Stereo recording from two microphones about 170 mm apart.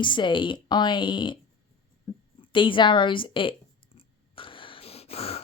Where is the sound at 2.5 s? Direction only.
30° left (ahead or behind).